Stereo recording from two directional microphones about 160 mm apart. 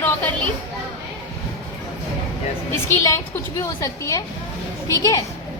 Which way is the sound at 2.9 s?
20° left (ahead or behind).